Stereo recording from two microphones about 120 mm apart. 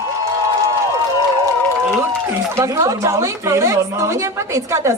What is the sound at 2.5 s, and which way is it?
A woman's voice, 25° right (ahead or behind).